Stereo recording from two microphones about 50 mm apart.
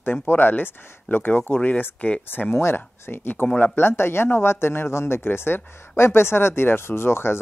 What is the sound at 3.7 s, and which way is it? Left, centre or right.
Speech, left.